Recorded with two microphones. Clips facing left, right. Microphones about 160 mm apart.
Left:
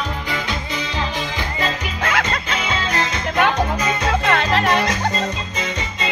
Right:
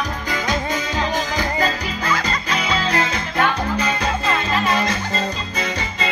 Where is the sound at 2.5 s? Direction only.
30° right (ahead or behind).